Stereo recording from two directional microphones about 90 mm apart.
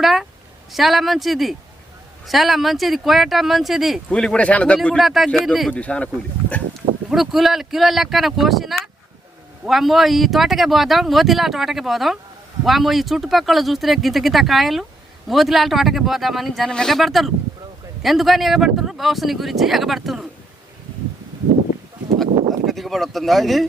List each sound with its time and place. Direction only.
0.0 s a woman's voice: centre (ahead or behind)
4.1 s speech: 10° left (ahead or behind)
4.9 s speech: centre (ahead or behind)
5.7 s speech: 15° left (ahead or behind)
7.1 s speech: 5° right (ahead or behind)
22.6 s speech: centre (ahead or behind)